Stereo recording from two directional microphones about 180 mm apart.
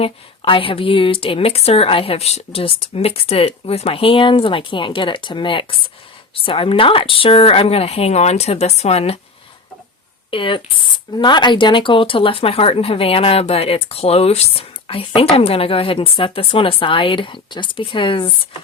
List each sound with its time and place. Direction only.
0.0 s speech: 30° left (ahead or behind)
10.3 s speech: 30° left (ahead or behind)